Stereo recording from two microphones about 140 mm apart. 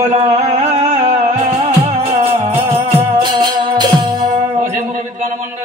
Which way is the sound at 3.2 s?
30° right (ahead or behind).